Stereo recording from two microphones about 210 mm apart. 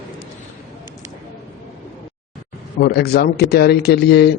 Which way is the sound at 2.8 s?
50° left (ahead or behind).